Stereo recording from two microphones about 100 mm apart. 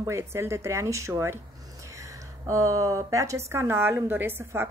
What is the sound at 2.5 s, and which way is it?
Speech, 35° right (ahead or behind).